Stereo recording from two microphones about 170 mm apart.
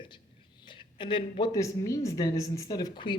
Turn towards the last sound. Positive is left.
turn(degrees=30)  # may be behind; listen again after turning